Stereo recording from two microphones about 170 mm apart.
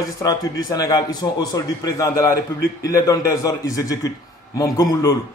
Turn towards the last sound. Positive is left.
turn(degrees=20)  # may be behind; listen again after turning